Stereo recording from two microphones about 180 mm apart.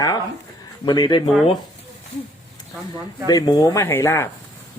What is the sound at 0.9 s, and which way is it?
Speech, 25° left (ahead or behind).